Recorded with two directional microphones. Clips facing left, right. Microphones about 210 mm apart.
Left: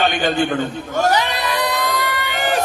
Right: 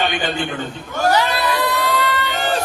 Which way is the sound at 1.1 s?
20° left (ahead or behind).